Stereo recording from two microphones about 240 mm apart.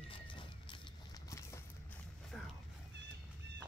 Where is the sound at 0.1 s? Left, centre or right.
Left.